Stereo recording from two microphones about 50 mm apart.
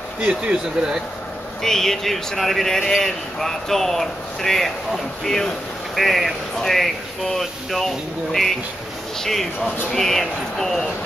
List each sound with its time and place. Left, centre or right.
0.2 s speech: centre
1.6 s speech: centre